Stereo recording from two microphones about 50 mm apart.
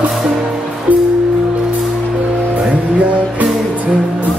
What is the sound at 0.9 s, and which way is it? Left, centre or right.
Music, right.